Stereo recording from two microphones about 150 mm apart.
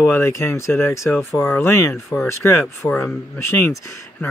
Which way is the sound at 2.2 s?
20° left (ahead or behind).